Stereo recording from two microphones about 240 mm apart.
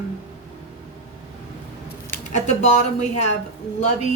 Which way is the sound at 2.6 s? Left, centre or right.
Left.